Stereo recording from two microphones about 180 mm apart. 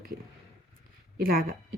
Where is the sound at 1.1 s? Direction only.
55° right (ahead or behind).